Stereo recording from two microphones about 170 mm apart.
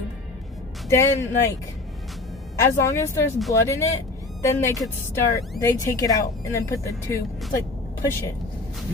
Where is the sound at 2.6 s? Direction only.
15° left (ahead or behind).